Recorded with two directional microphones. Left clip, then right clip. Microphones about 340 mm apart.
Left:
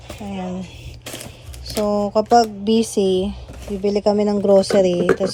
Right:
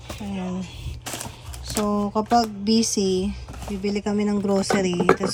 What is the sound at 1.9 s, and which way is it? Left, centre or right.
Speech, centre.